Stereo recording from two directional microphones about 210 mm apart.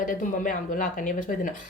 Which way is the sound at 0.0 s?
40° left (ahead or behind).